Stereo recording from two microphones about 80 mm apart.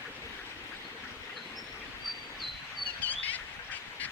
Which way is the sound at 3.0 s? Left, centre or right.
Left.